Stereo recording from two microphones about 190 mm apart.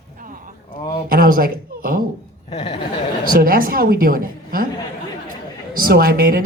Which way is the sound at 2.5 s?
30° left (ahead or behind).